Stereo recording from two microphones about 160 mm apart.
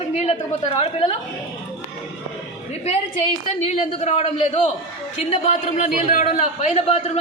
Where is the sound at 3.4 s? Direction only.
45° left (ahead or behind).